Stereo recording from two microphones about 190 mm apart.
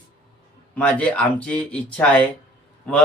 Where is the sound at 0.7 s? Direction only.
5° left (ahead or behind).